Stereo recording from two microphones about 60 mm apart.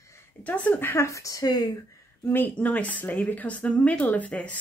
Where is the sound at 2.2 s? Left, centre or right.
Left.